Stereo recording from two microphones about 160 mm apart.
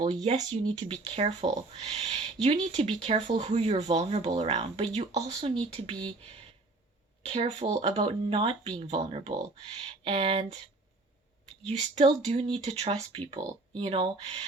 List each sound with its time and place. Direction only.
0.0 s speech: 40° right (ahead or behind)
11.6 s speech: 45° right (ahead or behind)